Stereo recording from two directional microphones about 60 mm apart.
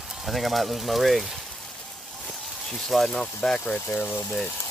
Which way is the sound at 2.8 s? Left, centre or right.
Centre.